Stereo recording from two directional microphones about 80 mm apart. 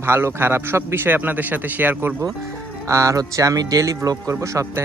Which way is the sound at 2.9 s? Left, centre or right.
Right.